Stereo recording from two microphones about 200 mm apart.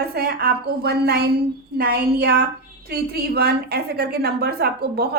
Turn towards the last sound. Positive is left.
turn(degrees=-50)  # may be behind; listen again after turning